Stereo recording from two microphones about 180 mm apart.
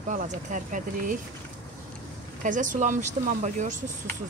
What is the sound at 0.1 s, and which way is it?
Speech, 45° right (ahead or behind).